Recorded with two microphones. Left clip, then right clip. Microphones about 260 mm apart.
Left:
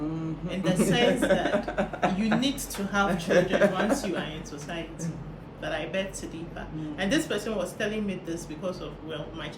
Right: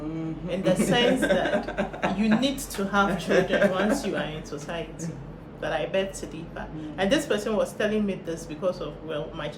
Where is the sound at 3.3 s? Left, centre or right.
Centre.